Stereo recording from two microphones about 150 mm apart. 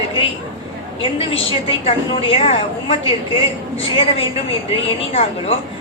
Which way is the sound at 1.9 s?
40° left (ahead or behind).